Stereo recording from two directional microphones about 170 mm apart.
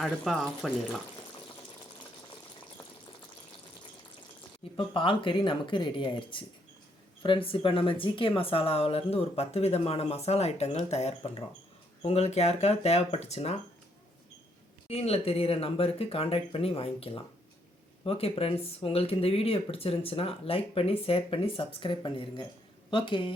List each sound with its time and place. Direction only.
0.0 s speech: centre (ahead or behind)
4.6 s a sound: 35° left (ahead or behind)
4.9 s speech: 30° left (ahead or behind)
14.8 s speech: 35° left (ahead or behind)